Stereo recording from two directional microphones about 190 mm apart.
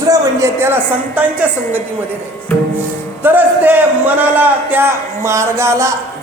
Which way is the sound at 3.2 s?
10° right (ahead or behind).